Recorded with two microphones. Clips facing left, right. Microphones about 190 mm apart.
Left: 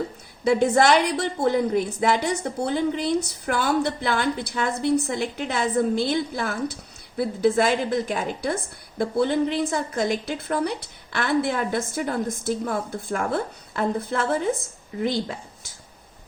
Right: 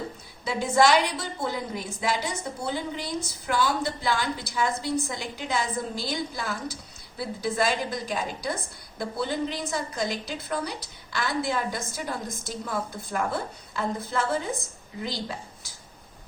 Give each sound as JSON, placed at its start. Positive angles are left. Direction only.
{"t": 0.4, "sound": "a woman's voice", "side_deg": 60}